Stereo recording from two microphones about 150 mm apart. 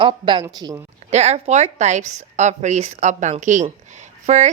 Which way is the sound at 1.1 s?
45° right (ahead or behind).